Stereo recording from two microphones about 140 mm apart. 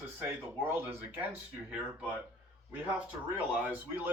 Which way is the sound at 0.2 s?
15° right (ahead or behind).